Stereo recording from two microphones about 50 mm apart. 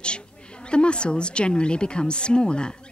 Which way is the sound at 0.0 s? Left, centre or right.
Left.